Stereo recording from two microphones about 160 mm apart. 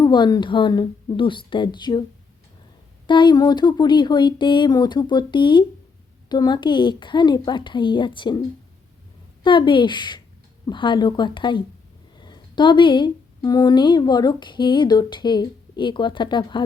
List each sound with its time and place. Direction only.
0.0 s a woman's voice: 25° left (ahead or behind)
3.1 s a woman's voice: 30° left (ahead or behind)
9.4 s a woman's voice: 30° left (ahead or behind)